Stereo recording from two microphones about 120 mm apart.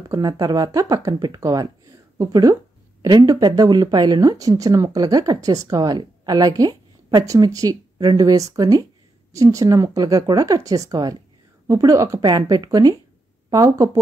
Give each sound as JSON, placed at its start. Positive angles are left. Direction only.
{"t": 0.1, "sound": "speech", "side_deg": -30}